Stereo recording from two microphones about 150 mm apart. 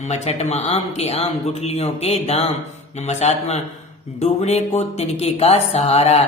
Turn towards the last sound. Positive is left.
turn(degrees=45)  # may be behind; listen again after turning